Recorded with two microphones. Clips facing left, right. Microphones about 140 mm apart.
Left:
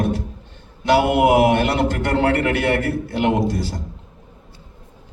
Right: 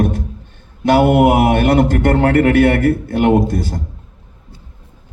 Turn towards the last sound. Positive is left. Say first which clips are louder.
# right 5 dB
turn(degrees=-55)  # may be behind; listen again after turning